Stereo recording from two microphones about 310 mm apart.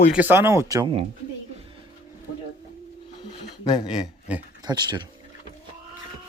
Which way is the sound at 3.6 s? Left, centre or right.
Centre.